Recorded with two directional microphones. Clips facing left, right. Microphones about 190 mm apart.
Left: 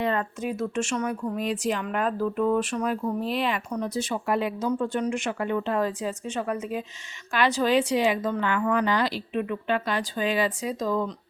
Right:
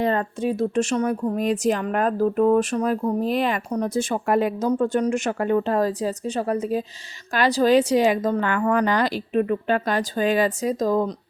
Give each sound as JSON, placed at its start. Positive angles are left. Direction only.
{"t": 0.0, "sound": "speech", "side_deg": -35}